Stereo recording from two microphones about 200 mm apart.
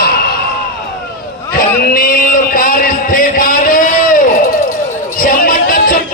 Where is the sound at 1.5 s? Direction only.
45° left (ahead or behind).